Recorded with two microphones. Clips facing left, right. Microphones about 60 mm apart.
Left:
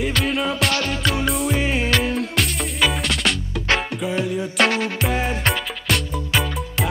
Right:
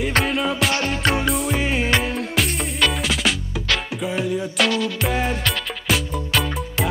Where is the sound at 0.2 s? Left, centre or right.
Centre.